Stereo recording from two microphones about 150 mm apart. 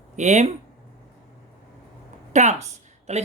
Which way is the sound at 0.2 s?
50° right (ahead or behind).